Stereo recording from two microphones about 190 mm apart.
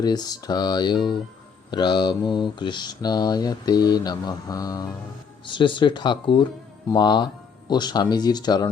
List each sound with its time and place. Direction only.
0.0 s speech: 20° left (ahead or behind)